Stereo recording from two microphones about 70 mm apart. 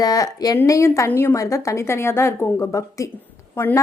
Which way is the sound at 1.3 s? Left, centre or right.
Left.